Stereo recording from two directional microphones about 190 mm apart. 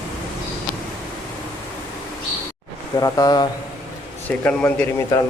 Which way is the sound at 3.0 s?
20° left (ahead or behind).